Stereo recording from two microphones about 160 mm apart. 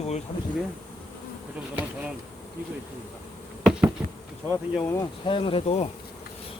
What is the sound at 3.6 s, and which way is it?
Insect, 5° right (ahead or behind).